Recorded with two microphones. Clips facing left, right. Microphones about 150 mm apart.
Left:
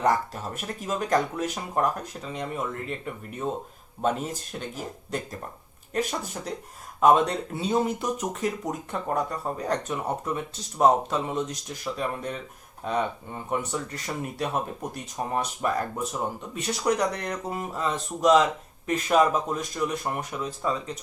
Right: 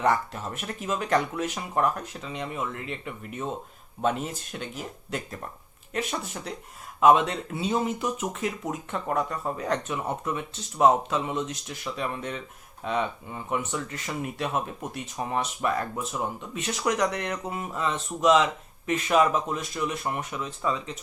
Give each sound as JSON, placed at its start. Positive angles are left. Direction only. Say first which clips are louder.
{"t": 0.0, "sound": "speech", "louder": "left 1 dB", "side_deg": 40}
{"t": 5.9, "sound": "speech", "louder": "left 2 dB", "side_deg": 40}